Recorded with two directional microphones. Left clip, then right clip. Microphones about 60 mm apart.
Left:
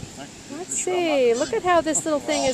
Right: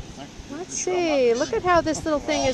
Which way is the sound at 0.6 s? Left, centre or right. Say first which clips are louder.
Even; centre.